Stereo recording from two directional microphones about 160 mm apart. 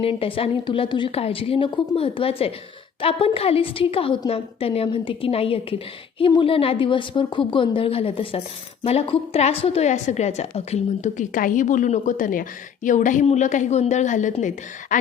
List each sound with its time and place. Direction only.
0.0 s a woman's voice: 35° left (ahead or behind); by 14.9 s 50° left (ahead or behind)